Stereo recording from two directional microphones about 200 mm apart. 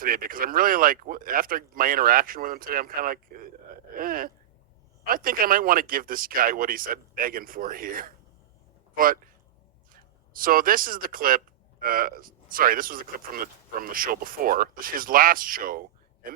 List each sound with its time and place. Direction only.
0.0 s speech: 45° right (ahead or behind)